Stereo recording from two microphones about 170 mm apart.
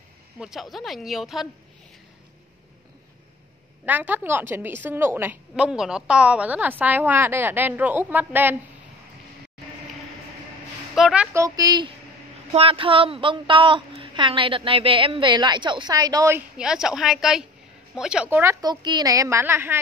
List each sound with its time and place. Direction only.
0.4 s speech: centre (ahead or behind)
3.8 s a woman's voice: 10° right (ahead or behind)
11.0 s speech: 5° right (ahead or behind)
11.3 s a woman's voice: 20° right (ahead or behind)
16.5 s a woman's voice: 5° right (ahead or behind)